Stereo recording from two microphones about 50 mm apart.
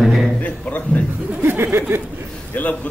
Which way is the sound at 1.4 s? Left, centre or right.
Right.